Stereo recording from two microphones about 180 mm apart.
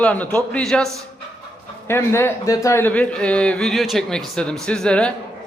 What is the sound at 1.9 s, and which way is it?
Speech, 15° left (ahead or behind).